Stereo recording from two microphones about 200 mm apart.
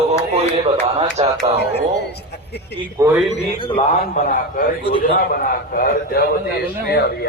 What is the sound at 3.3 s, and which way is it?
Speech, 25° left (ahead or behind).